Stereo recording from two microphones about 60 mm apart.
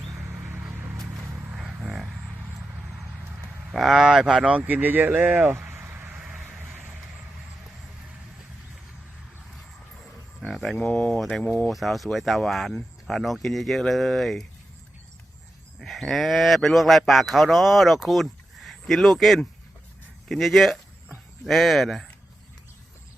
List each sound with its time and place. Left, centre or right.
1.0 s a sound: right
1.8 s a sound: centre
3.7 s speech: centre
4.4 s speech: right
5.2 s a sound: right
10.4 s speech: centre
10.8 s speech: left
11.1 s speech: centre
11.4 s speech: centre
11.7 s speech: centre
15.8 s speech: centre